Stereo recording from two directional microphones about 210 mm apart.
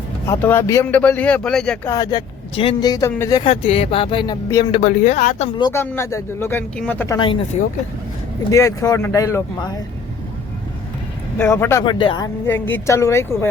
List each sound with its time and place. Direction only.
0.3 s speech: 10° left (ahead or behind)
1.9 s speech: 20° left (ahead or behind)
4.8 s speech: 35° left (ahead or behind)
5.5 s speech: 20° left (ahead or behind)
7.2 s speech: 25° left (ahead or behind)
8.4 s speech: 15° left (ahead or behind)
11.3 s speech: 10° left (ahead or behind)